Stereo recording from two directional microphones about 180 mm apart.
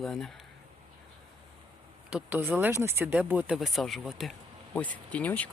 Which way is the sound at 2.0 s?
5° right (ahead or behind).